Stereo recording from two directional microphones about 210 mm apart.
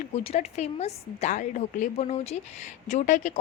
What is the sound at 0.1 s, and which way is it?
A woman's voice, 30° left (ahead or behind).